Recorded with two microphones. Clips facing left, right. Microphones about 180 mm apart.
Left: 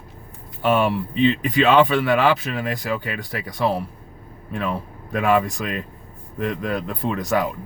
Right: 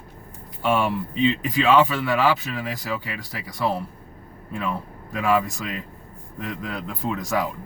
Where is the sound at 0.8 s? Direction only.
65° left (ahead or behind).